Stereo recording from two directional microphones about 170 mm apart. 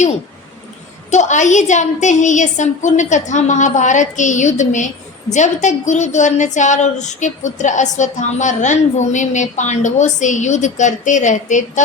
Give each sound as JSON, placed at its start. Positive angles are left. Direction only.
{"t": 1.1, "sound": "a woman's voice", "side_deg": 45}